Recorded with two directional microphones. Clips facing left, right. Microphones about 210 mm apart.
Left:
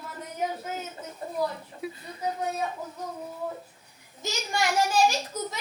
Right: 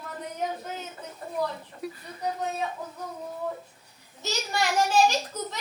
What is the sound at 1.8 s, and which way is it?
Speech, centre (ahead or behind).